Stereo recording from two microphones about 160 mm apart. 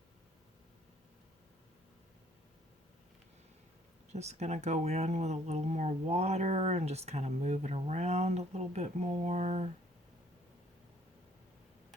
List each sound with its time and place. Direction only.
4.1 s speech: 45° right (ahead or behind)